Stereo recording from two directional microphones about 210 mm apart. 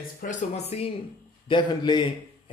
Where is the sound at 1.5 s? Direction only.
20° left (ahead or behind).